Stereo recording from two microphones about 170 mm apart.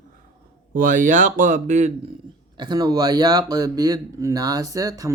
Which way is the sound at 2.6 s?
25° right (ahead or behind).